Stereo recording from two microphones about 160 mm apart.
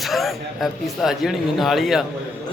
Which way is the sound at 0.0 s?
Centre (ahead or behind).